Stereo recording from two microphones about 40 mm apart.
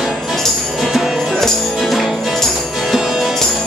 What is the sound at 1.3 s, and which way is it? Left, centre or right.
Music, centre.